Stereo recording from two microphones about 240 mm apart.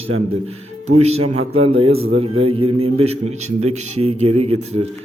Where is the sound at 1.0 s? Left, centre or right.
Right.